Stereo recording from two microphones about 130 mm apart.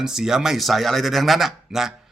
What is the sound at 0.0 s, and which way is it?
Speech, 5° right (ahead or behind).